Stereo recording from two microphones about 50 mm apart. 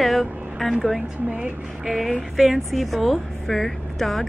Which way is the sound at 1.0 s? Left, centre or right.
Centre.